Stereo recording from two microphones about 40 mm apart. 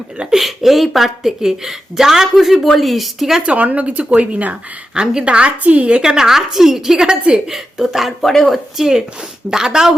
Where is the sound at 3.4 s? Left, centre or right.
Right.